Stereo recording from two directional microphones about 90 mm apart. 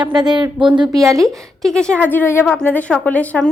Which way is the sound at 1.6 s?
10° left (ahead or behind).